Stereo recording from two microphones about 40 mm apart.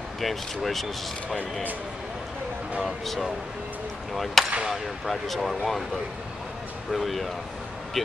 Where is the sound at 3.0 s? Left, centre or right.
Centre.